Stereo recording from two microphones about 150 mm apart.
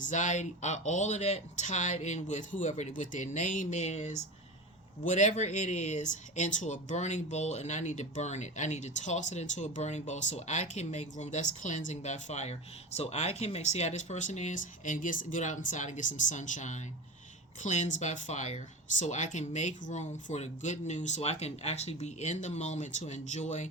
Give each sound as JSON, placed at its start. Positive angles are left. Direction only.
{"t": 0.0, "sound": "speech", "side_deg": 55}